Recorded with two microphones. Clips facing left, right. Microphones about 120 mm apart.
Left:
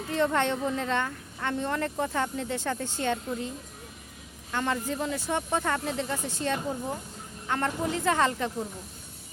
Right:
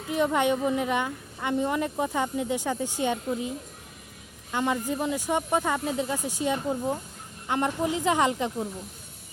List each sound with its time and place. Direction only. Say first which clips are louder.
0.1 s a woman's voice: right 2 dB; 10° right (ahead or behind)
4.5 s a woman's voice: right 2 dB; 15° right (ahead or behind)